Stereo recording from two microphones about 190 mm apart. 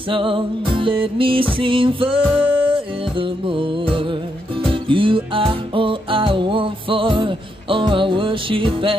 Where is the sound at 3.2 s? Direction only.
25° right (ahead or behind).